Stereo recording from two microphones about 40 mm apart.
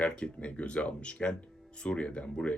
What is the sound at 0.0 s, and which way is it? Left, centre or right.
Speech, left.